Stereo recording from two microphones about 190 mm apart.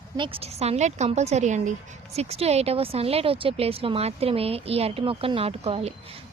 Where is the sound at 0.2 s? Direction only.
30° right (ahead or behind).